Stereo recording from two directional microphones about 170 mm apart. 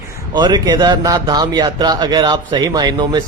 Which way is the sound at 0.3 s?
25° right (ahead or behind).